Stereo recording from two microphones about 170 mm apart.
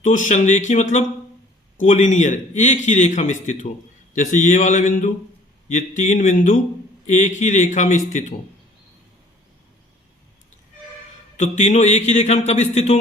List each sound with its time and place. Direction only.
0.0 s a man's voice: 45° left (ahead or behind)
11.3 s speech: 45° left (ahead or behind)